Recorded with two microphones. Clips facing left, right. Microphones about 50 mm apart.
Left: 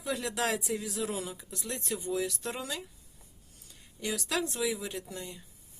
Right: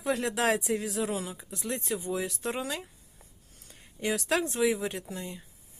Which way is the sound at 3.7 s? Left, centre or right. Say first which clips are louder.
Right 5 dB; right.